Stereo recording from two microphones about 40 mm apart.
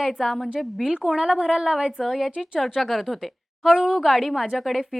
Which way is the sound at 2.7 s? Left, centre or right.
Centre.